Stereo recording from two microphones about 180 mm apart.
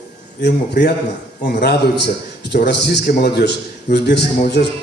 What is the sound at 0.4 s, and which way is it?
A man's voice, 65° left (ahead or behind).